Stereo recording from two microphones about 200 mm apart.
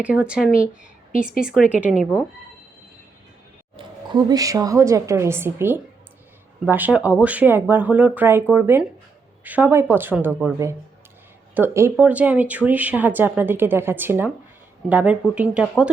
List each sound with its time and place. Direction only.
0.0 s a woman's voice: 5° right (ahead or behind)
3.8 s speech: 20° right (ahead or behind); by 15.9 s 5° right (ahead or behind)